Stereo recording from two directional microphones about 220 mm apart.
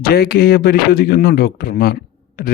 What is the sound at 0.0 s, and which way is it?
A man's voice, 45° left (ahead or behind).